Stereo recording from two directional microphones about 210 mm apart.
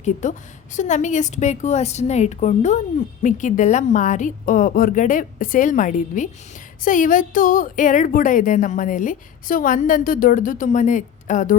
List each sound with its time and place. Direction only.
0.0 s a woman's voice: 35° left (ahead or behind)